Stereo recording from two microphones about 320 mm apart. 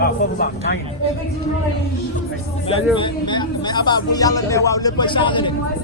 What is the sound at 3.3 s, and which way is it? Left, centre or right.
Speech, centre.